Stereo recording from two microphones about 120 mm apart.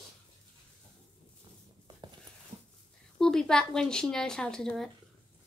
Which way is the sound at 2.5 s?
70° right (ahead or behind).